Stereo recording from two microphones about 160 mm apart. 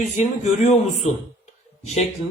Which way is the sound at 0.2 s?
45° left (ahead or behind).